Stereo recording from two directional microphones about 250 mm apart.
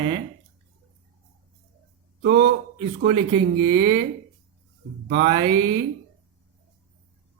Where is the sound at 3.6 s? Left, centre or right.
Right.